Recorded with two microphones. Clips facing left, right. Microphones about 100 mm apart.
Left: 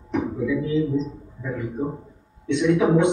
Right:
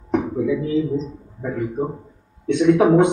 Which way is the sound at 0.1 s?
45° right (ahead or behind).